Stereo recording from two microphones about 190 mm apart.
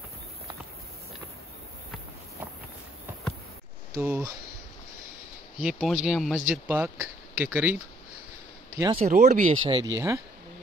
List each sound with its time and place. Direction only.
4.0 s speech: 10° right (ahead or behind)
5.6 s speech: 5° right (ahead or behind)
8.7 s speech: 20° right (ahead or behind)
9.0 s speech: 40° right (ahead or behind)
9.6 s speech: 25° right (ahead or behind)